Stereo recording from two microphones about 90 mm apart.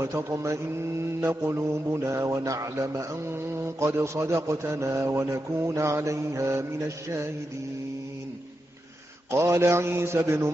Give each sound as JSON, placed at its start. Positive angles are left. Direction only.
{"t": 0.0, "sound": "mantra", "side_deg": -35}
{"t": 9.3, "sound": "a man's voice", "side_deg": -30}